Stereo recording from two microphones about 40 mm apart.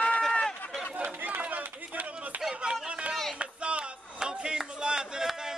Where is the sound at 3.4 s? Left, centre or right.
Right.